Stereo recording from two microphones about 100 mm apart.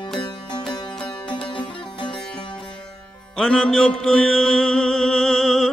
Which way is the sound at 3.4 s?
5° left (ahead or behind).